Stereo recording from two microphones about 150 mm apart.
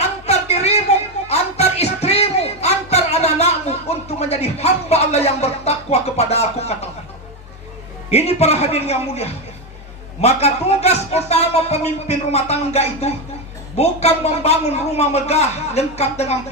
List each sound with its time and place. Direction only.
0.0 s music: 45° left (ahead or behind)
8.1 s speech: 45° left (ahead or behind)